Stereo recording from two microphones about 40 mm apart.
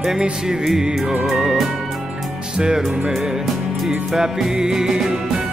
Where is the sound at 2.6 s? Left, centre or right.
Right.